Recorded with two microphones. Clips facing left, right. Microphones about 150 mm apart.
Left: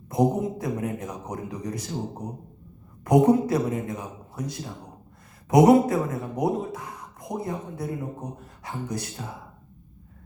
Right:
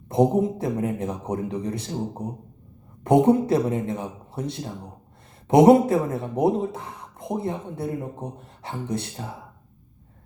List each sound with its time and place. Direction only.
0.1 s speech: 25° right (ahead or behind)